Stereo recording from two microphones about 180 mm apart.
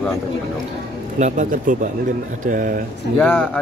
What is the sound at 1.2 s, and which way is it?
Speech, 45° right (ahead or behind).